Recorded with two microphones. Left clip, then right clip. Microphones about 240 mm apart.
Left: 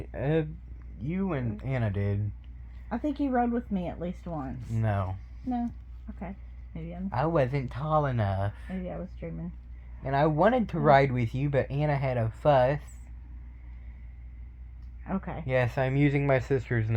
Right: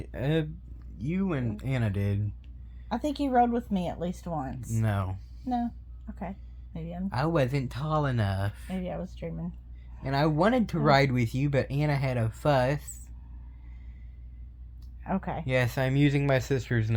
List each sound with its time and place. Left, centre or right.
0.0 s speech: centre
2.9 s speech: right
4.7 s speech: right
6.1 s speech: right
7.1 s speech: centre
8.7 s speech: right
10.0 s speech: centre
15.0 s speech: right
15.4 s speech: centre